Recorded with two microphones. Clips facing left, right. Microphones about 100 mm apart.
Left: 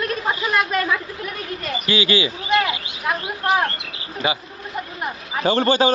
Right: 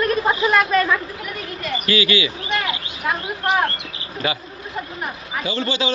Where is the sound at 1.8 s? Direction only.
25° left (ahead or behind).